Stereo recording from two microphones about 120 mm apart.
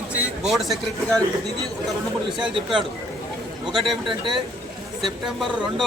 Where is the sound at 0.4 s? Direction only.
Centre (ahead or behind).